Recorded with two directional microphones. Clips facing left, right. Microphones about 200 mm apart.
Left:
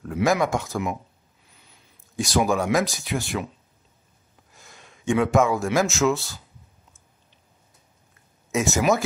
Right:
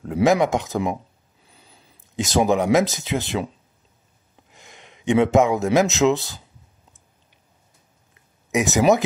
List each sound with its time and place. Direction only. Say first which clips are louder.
0.0 s speech: right 4 dB; 20° right (ahead or behind)
1.5 s a sound: right 5 dB; 30° right (ahead or behind)
2.1 s speech: right 3 dB; 20° right (ahead or behind)
4.5 s speech: right 3 dB; 20° right (ahead or behind)
8.5 s speech: right 4 dB; 20° right (ahead or behind)